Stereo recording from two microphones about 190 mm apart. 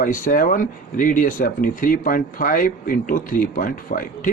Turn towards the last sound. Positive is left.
turn(degrees=45)  # may be behind; listen again after turning